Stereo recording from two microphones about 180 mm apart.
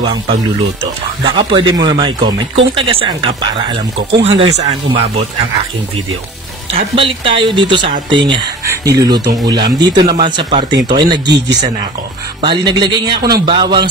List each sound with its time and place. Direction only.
0.0 s speech: 25° right (ahead or behind)
6.7 s speech: 30° right (ahead or behind)
12.4 s speech: 25° right (ahead or behind)